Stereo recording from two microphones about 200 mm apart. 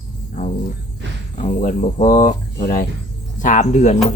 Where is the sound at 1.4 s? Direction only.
40° left (ahead or behind).